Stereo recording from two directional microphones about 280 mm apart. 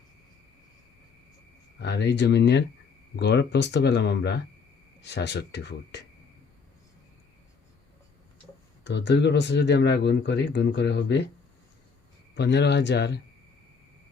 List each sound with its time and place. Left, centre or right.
1.8 s speech: left
8.8 s speech: left
12.4 s speech: left